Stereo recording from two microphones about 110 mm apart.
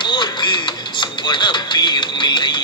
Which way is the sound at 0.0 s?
45° left (ahead or behind).